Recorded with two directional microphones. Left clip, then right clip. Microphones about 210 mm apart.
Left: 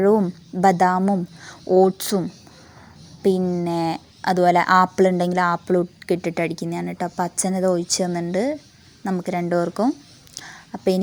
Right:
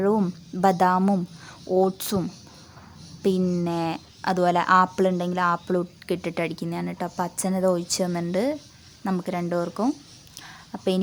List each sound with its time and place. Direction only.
0.0 s a woman's voice: 10° left (ahead or behind)
3.7 s a woman's voice: 15° left (ahead or behind)
10.3 s a sound: 15° left (ahead or behind)